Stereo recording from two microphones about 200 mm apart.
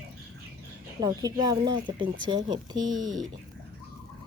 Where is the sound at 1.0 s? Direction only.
20° right (ahead or behind).